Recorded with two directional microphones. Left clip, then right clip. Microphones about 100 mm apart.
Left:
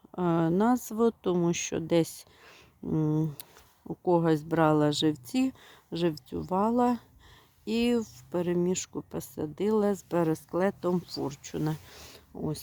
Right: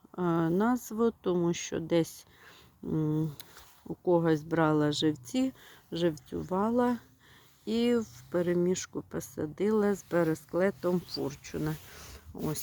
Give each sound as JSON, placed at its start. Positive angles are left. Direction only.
{"t": 0.1, "sound": "speech", "side_deg": 55}
{"t": 11.5, "sound": "speech", "side_deg": 65}
{"t": 12.3, "sound": "speech", "side_deg": 20}